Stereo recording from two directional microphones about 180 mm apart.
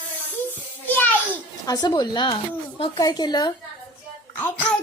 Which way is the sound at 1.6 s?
20° left (ahead or behind).